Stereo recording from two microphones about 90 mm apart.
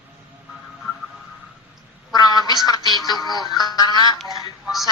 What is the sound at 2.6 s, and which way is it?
Music, 45° left (ahead or behind).